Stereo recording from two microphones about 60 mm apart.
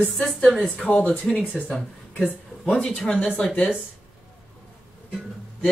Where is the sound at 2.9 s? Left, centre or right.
Centre.